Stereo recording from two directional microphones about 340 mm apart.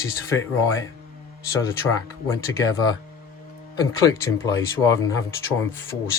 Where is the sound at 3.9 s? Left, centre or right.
Centre.